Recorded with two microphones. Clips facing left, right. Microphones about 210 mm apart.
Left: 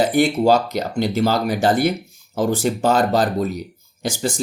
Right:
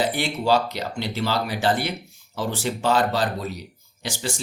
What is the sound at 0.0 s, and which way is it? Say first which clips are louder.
Speech: left 8 dB; 45° left (ahead or behind).